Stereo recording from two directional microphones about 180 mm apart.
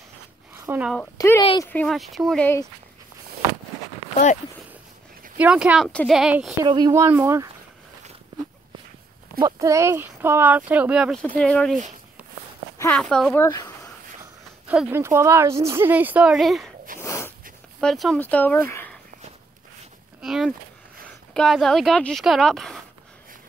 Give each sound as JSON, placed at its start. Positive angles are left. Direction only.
{"t": 0.7, "sound": "a woman's voice", "side_deg": -10}
{"t": 1.1, "sound": "speech", "side_deg": 15}
{"t": 4.1, "sound": "a sound", "side_deg": 45}
{"t": 5.4, "sound": "speech", "side_deg": -5}
{"t": 6.6, "sound": "a woman's voice", "side_deg": -20}
{"t": 9.6, "sound": "a woman's voice", "side_deg": -15}
{"t": 11.2, "sound": "speech", "side_deg": 5}
{"t": 12.7, "sound": "speech", "side_deg": 10}
{"t": 13.4, "sound": "speech", "side_deg": 20}
{"t": 14.7, "sound": "a woman's voice", "side_deg": -10}
{"t": 17.0, "sound": "a sound", "side_deg": 15}
{"t": 17.7, "sound": "speech", "side_deg": 0}
{"t": 20.2, "sound": "a sound", "side_deg": 0}
{"t": 21.3, "sound": "speech", "side_deg": 5}